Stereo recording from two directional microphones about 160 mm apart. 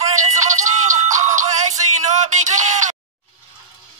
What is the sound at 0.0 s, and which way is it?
Music, 45° right (ahead or behind).